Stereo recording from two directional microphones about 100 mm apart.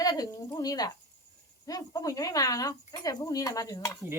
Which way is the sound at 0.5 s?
40° left (ahead or behind).